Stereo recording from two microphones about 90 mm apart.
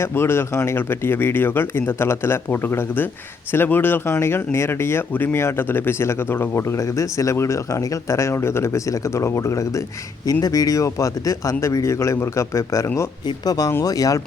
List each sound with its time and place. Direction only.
0.0 s speech: 25° left (ahead or behind)
6.6 s speech: 35° left (ahead or behind)
13.2 s speech: 45° left (ahead or behind)